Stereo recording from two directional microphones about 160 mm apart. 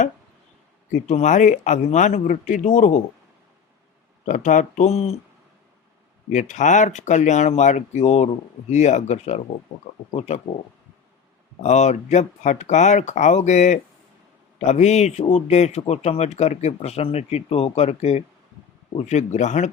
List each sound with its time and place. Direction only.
1.0 s speech: 45° left (ahead or behind)
4.3 s speech: 50° left (ahead or behind)
6.3 s speech: 50° left (ahead or behind)
11.6 s speech: 45° left (ahead or behind)